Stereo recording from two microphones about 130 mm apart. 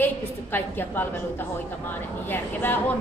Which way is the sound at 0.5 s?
15° left (ahead or behind).